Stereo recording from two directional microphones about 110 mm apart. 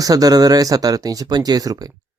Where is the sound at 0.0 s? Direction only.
35° right (ahead or behind).